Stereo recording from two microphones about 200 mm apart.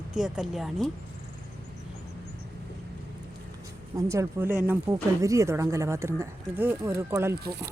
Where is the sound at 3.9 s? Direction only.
15° right (ahead or behind).